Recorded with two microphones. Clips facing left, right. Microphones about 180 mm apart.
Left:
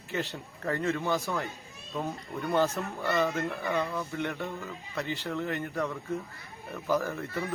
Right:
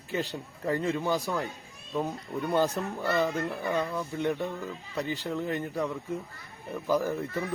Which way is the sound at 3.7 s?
10° right (ahead or behind).